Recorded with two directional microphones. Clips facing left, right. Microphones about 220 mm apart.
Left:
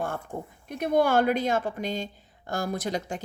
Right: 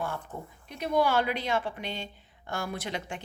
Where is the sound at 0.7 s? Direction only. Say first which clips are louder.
Left 3 dB; 50° left (ahead or behind).